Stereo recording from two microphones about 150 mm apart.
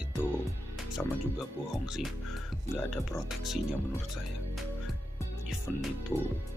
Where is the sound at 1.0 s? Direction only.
5° left (ahead or behind).